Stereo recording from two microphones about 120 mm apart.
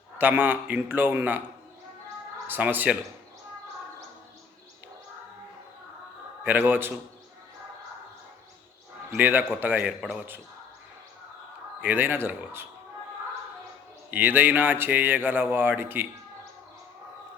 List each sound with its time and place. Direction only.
0.2 s speech: 15° right (ahead or behind)
2.5 s speech: 15° right (ahead or behind)
6.4 s speech: 15° right (ahead or behind)
9.1 s speech: 15° right (ahead or behind)
10.0 s a man's voice: centre (ahead or behind)
11.8 s speech: 15° right (ahead or behind)
14.1 s speech: 15° right (ahead or behind)